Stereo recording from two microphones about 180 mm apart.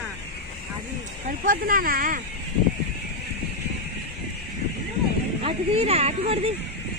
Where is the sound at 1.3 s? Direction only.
50° right (ahead or behind).